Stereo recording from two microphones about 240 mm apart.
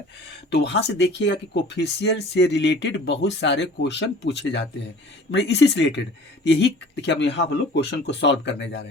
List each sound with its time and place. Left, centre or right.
0.5 s speech: left